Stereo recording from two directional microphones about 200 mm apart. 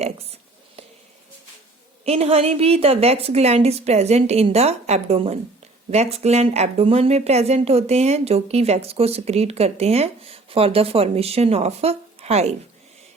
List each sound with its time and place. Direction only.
2.0 s speech: 30° right (ahead or behind)